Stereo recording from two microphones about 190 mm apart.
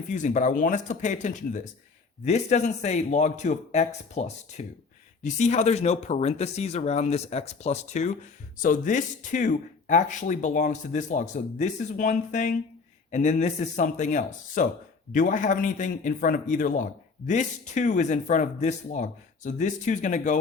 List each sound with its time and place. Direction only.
0.1 s a man's voice: 40° left (ahead or behind)